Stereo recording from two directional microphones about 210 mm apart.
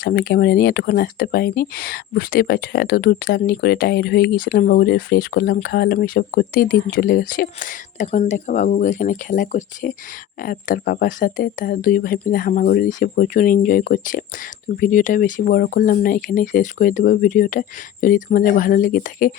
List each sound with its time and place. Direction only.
0.0 s speech: 45° left (ahead or behind)